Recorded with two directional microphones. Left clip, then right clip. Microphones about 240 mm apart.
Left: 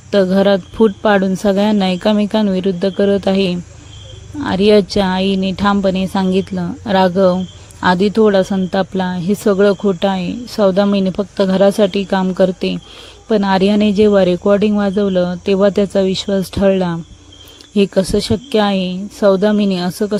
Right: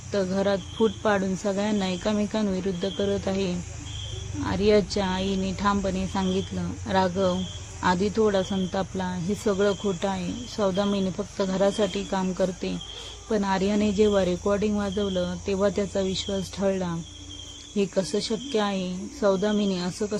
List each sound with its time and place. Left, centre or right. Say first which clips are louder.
0.1 s speech: left 13 dB; left